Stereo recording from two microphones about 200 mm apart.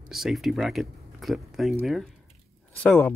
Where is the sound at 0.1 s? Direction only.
Centre (ahead or behind).